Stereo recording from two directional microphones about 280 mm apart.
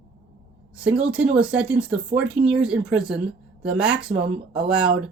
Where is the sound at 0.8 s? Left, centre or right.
Centre.